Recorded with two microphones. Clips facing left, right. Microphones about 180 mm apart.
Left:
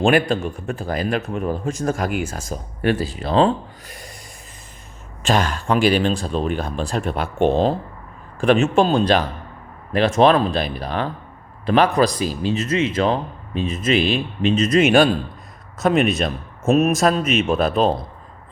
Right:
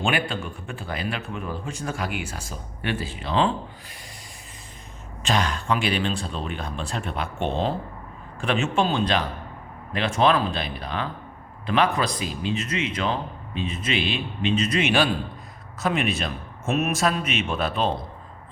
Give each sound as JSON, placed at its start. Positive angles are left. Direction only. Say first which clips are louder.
{"t": 0.0, "sound": "speech", "louder": "left 9 dB", "side_deg": 45}
{"t": 5.2, "sound": "speech", "louder": "left 5 dB", "side_deg": 45}